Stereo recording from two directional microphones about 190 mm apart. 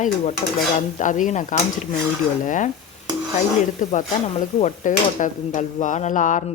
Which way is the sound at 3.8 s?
40° left (ahead or behind).